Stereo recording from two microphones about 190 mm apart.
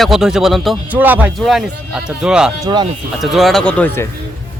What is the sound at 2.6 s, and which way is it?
Speech, 25° right (ahead or behind).